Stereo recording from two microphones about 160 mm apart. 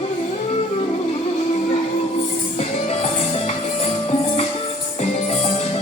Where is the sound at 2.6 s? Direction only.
40° left (ahead or behind).